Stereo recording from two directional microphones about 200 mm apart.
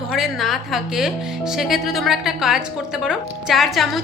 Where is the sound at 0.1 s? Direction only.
Centre (ahead or behind).